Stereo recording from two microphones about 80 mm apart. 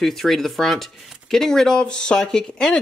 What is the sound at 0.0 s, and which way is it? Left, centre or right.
Speech, centre.